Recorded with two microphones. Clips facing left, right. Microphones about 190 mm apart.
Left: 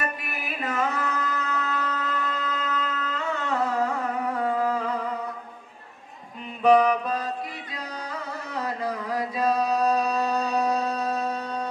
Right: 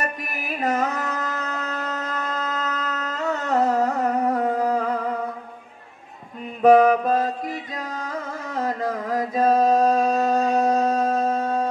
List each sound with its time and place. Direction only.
0.0 s carnatic music: 40° right (ahead or behind)
6.6 s music: 45° right (ahead or behind)